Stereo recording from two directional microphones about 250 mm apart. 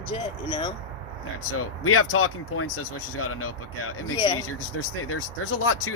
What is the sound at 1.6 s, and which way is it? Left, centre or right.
Speech, left.